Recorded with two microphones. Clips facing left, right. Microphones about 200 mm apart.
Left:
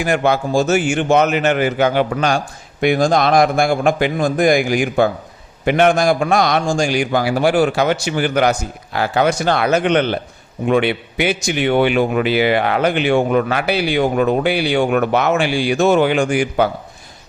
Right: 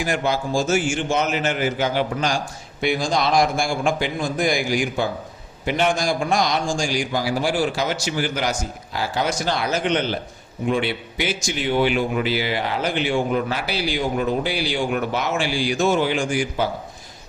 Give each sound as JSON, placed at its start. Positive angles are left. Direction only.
{"t": 0.0, "sound": "speech", "side_deg": 65}